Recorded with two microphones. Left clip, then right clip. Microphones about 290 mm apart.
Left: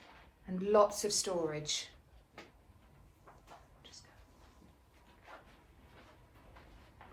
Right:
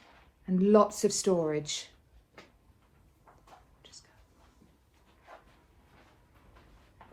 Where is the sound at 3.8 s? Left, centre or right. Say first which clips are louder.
Right 2 dB; right.